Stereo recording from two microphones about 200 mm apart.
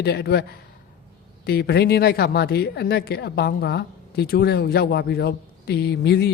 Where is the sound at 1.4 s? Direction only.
50° left (ahead or behind).